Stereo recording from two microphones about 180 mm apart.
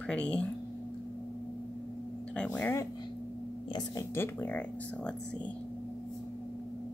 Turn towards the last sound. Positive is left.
turn(degrees=10)  # may be behind; listen again after turning